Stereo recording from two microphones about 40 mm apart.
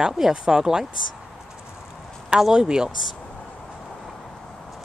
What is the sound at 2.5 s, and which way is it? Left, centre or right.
Speech, right.